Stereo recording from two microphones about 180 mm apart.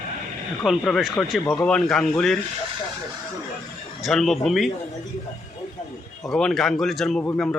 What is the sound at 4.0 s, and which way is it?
Speech, centre (ahead or behind).